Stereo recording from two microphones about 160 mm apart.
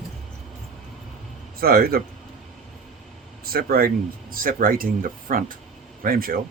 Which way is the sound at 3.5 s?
65° right (ahead or behind).